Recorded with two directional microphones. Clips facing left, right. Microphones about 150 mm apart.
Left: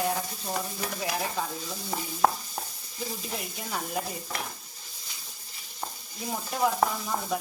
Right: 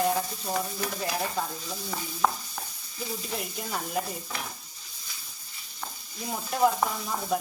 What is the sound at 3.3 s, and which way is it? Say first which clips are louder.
Frying: right 1 dB; centre (ahead or behind).